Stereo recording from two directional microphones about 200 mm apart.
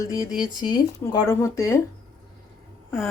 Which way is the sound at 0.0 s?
15° left (ahead or behind).